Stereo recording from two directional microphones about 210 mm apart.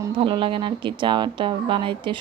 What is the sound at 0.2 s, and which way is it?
A woman's voice, 25° right (ahead or behind).